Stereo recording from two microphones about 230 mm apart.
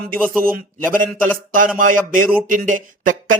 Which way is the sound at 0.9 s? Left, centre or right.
Right.